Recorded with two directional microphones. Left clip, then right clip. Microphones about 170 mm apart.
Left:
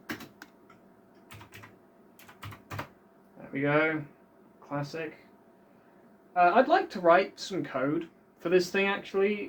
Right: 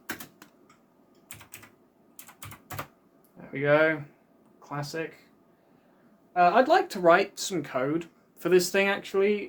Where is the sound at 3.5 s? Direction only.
90° right.